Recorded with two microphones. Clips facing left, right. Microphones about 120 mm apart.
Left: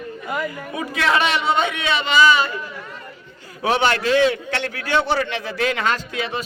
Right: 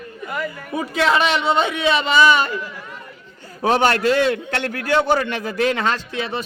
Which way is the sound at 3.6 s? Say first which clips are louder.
Right 2 dB; 40° right (ahead or behind).